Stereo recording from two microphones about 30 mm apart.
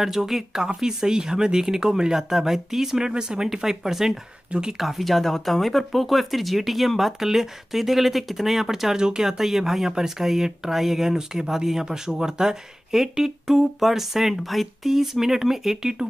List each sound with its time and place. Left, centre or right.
0.0 s speech: centre
0.7 s speech: right
3.0 s speech: right
8.9 s speech: right
9.4 s speech: centre
14.9 s speech: centre